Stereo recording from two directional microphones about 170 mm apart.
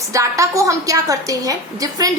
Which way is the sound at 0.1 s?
20° right (ahead or behind).